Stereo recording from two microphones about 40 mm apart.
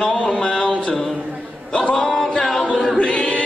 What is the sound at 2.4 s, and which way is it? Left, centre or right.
A capella, centre.